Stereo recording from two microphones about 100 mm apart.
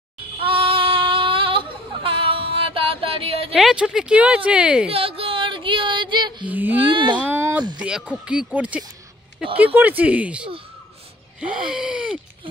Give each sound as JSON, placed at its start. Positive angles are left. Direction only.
{"t": 0.4, "sound": "child singing", "side_deg": -65}
{"t": 3.5, "sound": "gasp", "side_deg": -5}
{"t": 4.9, "sound": "child singing", "side_deg": -70}
{"t": 6.4, "sound": "speech", "side_deg": -15}
{"t": 6.9, "sound": "speech", "side_deg": -55}
{"t": 7.2, "sound": "a sound", "side_deg": -20}
{"t": 8.1, "sound": "gasp", "side_deg": -10}